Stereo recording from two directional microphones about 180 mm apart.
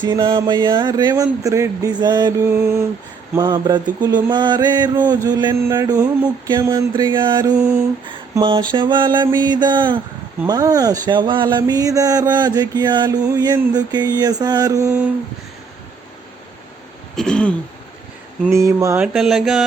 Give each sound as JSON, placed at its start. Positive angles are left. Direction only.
{"t": 0.0, "sound": "speech", "side_deg": -25}
{"t": 7.5, "sound": "mantra", "side_deg": -5}
{"t": 8.4, "sound": "speech", "side_deg": -30}
{"t": 17.2, "sound": "mantra", "side_deg": 5}
{"t": 18.5, "sound": "a sound", "side_deg": -15}
{"t": 19.0, "sound": "mantra", "side_deg": 0}